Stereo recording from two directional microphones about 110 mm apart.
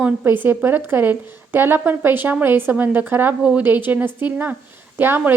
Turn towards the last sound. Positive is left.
turn(degrees=-20)  # may be behind; listen again after turning